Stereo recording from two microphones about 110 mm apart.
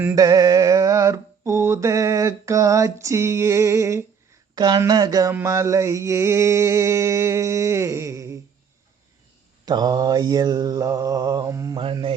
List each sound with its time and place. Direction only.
0.2 s mantra: 35° right (ahead or behind)
4.5 s speech: 40° right (ahead or behind)
4.9 s mantra: 35° right (ahead or behind)
5.3 s mantra: 25° right (ahead or behind)
9.6 s mantra: 40° right (ahead or behind)